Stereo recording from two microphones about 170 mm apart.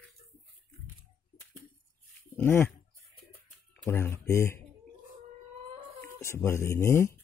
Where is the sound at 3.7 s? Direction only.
15° left (ahead or behind).